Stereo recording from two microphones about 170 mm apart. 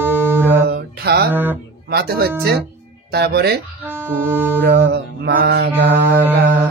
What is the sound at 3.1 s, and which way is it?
Speech, 70° right (ahead or behind).